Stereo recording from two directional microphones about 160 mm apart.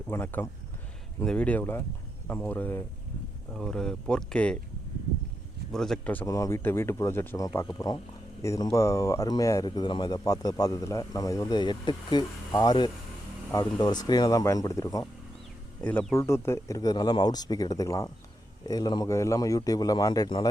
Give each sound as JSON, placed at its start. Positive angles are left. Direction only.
{"t": 0.1, "sound": "speech", "side_deg": 10}
{"t": 5.7, "sound": "speech", "side_deg": 5}
{"t": 6.2, "sound": "speech", "side_deg": 20}